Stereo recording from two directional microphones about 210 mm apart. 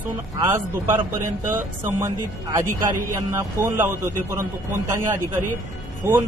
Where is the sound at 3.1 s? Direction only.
10° right (ahead or behind).